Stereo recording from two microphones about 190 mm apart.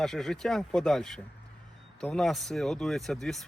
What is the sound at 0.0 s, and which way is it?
Speech, centre (ahead or behind).